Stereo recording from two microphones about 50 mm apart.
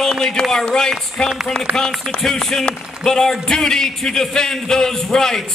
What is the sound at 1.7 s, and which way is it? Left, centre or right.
Speech, right.